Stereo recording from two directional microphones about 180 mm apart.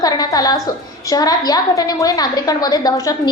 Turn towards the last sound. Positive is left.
turn(degrees=20)  # may be behind; listen again after turning